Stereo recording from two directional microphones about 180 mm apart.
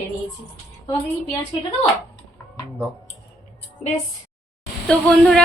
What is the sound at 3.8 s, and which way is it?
Speech, 40° left (ahead or behind).